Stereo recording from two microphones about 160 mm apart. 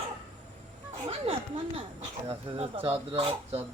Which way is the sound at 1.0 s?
35° right (ahead or behind).